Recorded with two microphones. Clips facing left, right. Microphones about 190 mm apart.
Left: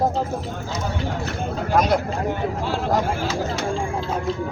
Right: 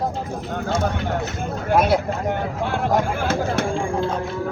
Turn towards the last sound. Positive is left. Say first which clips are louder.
# right 2 dB
turn(degrees=-55)  # may be behind; listen again after turning